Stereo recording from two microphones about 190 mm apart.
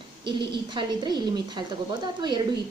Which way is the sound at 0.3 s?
25° right (ahead or behind).